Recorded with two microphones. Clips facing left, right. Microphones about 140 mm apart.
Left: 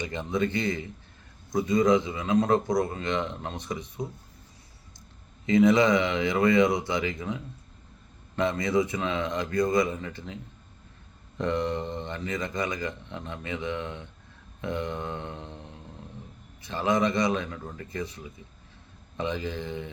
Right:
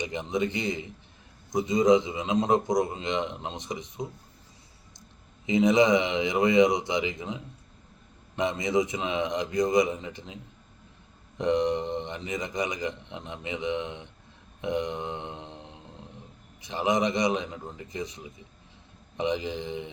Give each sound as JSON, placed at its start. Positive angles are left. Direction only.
{"t": 0.0, "sound": "speech", "side_deg": -20}
{"t": 5.5, "sound": "speech", "side_deg": -20}
{"t": 11.3, "sound": "speech", "side_deg": -20}
{"t": 14.6, "sound": "a sound", "side_deg": -20}
{"t": 16.6, "sound": "speech", "side_deg": -20}